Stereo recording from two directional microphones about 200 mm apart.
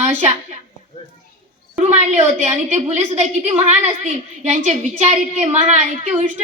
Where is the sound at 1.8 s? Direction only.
35° right (ahead or behind).